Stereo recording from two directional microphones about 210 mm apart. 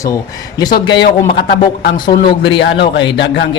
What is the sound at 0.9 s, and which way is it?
Speech, 50° left (ahead or behind).